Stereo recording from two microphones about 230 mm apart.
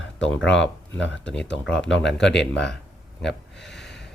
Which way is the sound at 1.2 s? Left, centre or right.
Centre.